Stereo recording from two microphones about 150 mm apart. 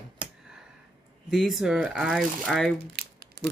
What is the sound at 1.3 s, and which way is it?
Speech, centre (ahead or behind).